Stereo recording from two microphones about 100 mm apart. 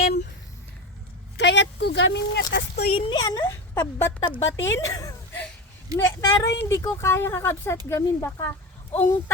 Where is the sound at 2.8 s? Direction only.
70° left (ahead or behind).